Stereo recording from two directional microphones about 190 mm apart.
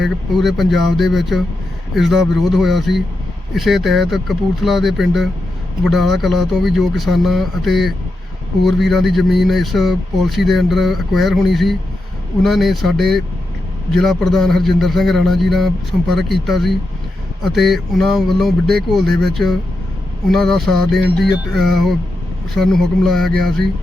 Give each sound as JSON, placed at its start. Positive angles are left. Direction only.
{"t": 0.0, "sound": "speech", "side_deg": 0}